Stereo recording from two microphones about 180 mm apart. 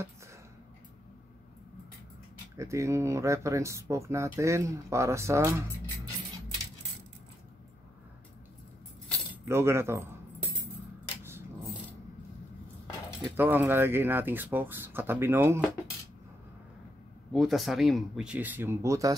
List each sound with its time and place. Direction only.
2.5 s speech: 15° right (ahead or behind)
9.4 s speech: 15° right (ahead or behind)
13.2 s speech: 10° right (ahead or behind)
17.3 s speech: centre (ahead or behind); by 19.1 s 20° right (ahead or behind)